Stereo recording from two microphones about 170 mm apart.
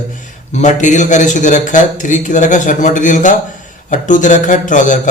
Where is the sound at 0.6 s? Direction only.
45° left (ahead or behind).